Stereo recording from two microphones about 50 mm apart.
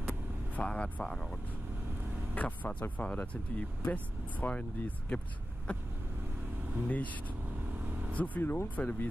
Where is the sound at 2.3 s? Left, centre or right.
Left.